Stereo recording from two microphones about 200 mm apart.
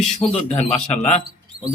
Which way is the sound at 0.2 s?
30° left (ahead or behind).